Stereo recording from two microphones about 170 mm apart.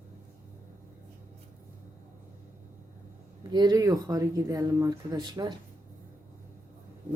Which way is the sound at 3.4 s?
25° right (ahead or behind).